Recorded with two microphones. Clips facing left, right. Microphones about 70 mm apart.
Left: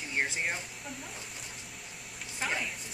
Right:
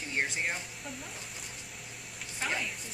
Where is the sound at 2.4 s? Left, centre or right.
Centre.